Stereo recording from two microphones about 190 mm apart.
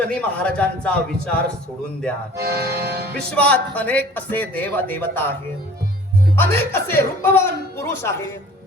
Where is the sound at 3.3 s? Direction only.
5° left (ahead or behind).